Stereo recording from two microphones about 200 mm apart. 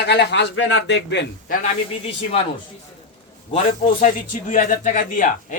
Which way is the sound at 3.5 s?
35° left (ahead or behind).